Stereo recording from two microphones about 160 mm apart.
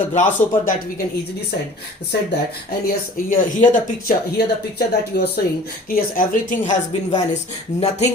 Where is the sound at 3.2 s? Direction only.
55° left (ahead or behind).